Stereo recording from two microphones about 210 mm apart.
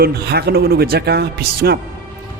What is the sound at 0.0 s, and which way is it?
Speech, 50° right (ahead or behind).